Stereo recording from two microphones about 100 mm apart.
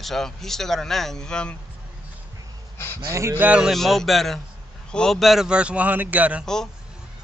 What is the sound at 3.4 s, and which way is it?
Speech, 10° right (ahead or behind).